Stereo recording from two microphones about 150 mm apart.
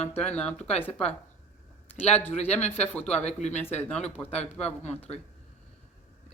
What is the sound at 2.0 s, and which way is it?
Speech, 45° left (ahead or behind).